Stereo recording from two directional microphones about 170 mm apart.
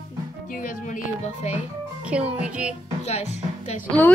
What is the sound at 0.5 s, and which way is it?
Speech, 50° left (ahead or behind).